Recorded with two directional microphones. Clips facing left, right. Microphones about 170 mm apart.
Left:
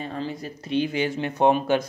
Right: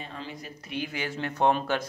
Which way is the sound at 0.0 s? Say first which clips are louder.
Left 8 dB; 40° left (ahead or behind).